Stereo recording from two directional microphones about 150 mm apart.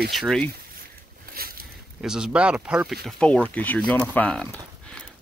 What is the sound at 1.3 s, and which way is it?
Boat, 80° right.